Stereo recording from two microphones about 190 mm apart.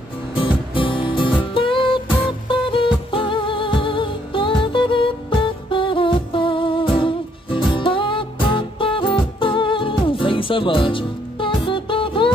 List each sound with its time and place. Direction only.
0.7 s music: 25° left (ahead or behind)